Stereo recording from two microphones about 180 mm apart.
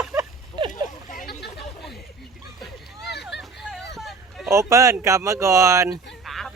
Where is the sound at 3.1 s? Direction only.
65° left (ahead or behind).